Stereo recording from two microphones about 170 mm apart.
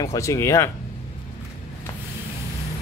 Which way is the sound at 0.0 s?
20° left (ahead or behind).